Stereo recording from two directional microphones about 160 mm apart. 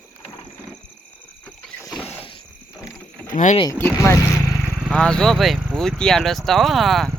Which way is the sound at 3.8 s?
15° left (ahead or behind).